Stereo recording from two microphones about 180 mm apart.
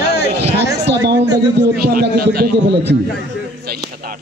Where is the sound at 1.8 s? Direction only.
55° right (ahead or behind).